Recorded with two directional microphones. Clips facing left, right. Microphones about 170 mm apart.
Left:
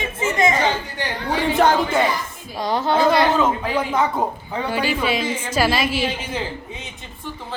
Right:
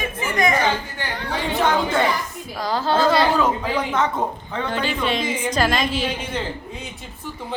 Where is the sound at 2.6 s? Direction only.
20° left (ahead or behind).